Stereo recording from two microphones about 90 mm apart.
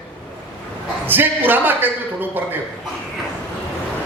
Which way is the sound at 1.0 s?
25° right (ahead or behind).